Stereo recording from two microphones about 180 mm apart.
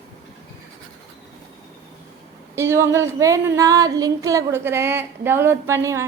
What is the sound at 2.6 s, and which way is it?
A woman's voice, 15° right (ahead or behind).